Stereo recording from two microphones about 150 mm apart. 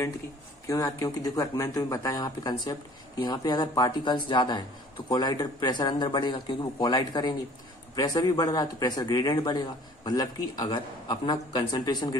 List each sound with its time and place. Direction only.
0.7 s speech: 20° left (ahead or behind)